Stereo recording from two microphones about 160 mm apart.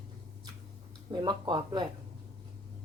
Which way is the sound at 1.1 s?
30° right (ahead or behind).